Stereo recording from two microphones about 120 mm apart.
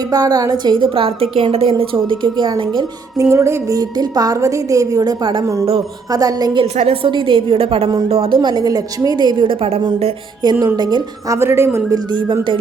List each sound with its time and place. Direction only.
0.1 s a woman's voice: 30° right (ahead or behind)
3.2 s a woman's voice: 25° right (ahead or behind)
6.7 s a woman's voice: 55° right (ahead or behind)
8.4 s a woman's voice: 35° right (ahead or behind); by 9.8 s 55° right (ahead or behind)
10.4 s a woman's voice: 35° right (ahead or behind)
11.3 s a woman's voice: 20° right (ahead or behind)